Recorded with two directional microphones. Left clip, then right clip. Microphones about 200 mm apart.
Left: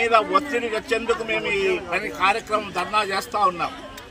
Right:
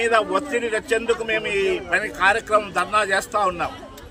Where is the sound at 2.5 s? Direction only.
5° right (ahead or behind).